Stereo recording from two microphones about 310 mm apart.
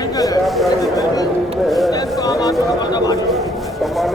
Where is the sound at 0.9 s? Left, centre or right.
Centre.